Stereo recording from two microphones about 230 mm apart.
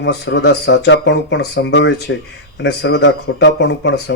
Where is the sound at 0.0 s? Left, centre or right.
Left.